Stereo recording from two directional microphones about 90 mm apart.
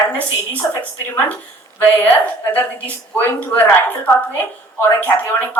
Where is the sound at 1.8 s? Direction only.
20° left (ahead or behind).